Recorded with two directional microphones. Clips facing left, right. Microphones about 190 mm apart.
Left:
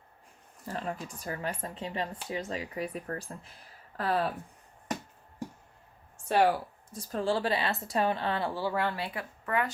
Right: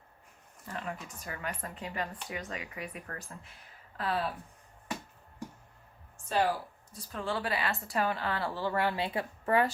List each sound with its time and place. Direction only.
0.6 s speech: 35° left (ahead or behind)
3.9 s speech: 45° left (ahead or behind)
6.2 s speech: 65° left (ahead or behind)
6.9 s speech: 35° left (ahead or behind); by 8.7 s 15° left (ahead or behind)
8.7 s speech: 5° right (ahead or behind)
9.0 s speech: 25° right (ahead or behind)